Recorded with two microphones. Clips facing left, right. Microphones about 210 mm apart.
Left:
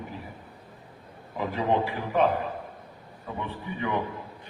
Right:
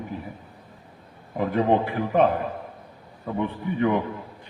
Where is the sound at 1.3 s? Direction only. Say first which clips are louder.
Right 5 dB; 55° right (ahead or behind).